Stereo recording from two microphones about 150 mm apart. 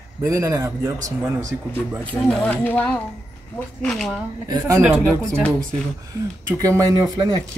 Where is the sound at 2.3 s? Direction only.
10° left (ahead or behind).